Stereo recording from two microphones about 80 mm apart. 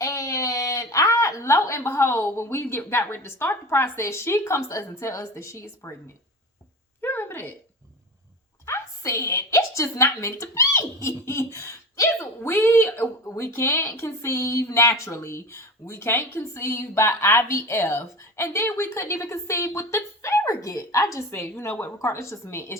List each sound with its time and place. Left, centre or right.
0.0 s speech: left
7.0 s a sound: left
8.6 s a woman's voice: left
21.2 s a woman's voice: left